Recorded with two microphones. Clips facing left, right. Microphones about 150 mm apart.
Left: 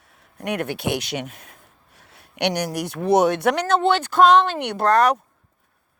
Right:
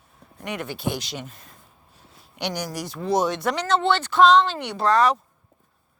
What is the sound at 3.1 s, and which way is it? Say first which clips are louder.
Speech: left 5 dB; 65° left (ahead or behind).